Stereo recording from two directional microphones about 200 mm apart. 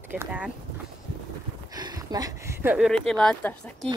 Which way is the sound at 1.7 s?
20° right (ahead or behind).